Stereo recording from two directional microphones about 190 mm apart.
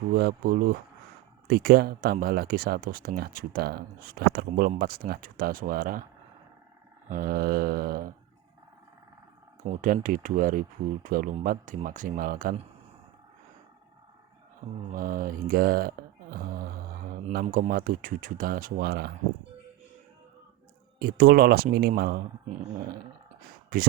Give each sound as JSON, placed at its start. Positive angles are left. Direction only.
{"t": 0.1, "sound": "speech", "side_deg": -55}
{"t": 7.1, "sound": "speech", "side_deg": -45}
{"t": 9.6, "sound": "speech", "side_deg": -45}
{"t": 14.9, "sound": "speech", "side_deg": -45}
{"t": 21.0, "sound": "speech", "side_deg": -50}
{"t": 23.7, "sound": "speech", "side_deg": -50}